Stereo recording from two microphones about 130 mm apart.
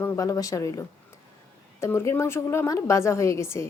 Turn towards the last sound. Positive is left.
turn(degrees=20)  # may be behind; listen again after turning